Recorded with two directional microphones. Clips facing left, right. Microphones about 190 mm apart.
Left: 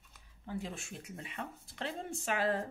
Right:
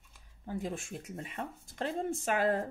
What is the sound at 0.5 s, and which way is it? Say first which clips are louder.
Speech: right 4 dB; 45° right (ahead or behind).